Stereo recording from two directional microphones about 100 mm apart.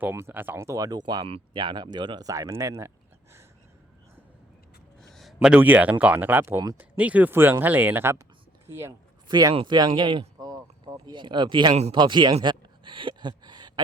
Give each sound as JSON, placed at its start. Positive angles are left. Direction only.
{"t": 0.0, "sound": "speech", "side_deg": -25}
{"t": 2.3, "sound": "speech", "side_deg": -30}
{"t": 5.1, "sound": "a sound", "side_deg": 0}
{"t": 5.5, "sound": "speech", "side_deg": -15}
{"t": 9.6, "sound": "speech", "side_deg": -45}